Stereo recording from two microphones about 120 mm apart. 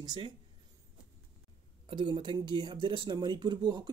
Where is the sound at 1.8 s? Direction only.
40° right (ahead or behind).